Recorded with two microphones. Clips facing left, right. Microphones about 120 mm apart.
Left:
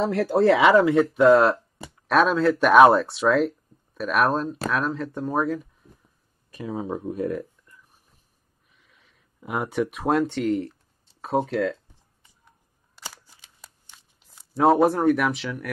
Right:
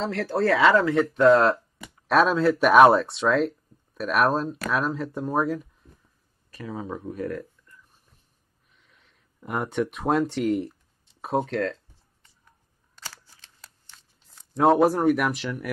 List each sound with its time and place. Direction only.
0.0 s speech: 15° left (ahead or behind)
0.9 s speech: 5° left (ahead or behind)
6.8 s speech: 20° left (ahead or behind)
8.7 s speech: centre (ahead or behind)
12.9 s shuffling cards: 15° left (ahead or behind)